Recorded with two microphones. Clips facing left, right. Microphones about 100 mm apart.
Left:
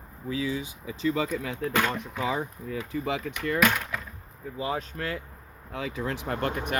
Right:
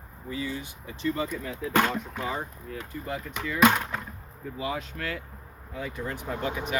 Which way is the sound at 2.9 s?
90° left.